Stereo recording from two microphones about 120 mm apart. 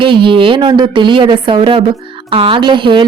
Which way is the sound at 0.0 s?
45° right (ahead or behind).